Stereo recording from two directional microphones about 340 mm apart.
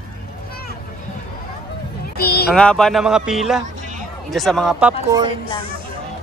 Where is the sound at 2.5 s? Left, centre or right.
Centre.